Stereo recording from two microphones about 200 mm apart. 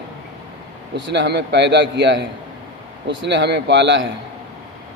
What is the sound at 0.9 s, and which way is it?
A man's voice, 60° right (ahead or behind).